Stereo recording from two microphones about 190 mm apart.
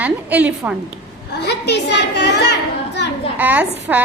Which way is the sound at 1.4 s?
65° left (ahead or behind).